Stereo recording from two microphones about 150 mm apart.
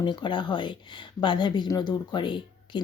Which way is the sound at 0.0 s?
30° left (ahead or behind).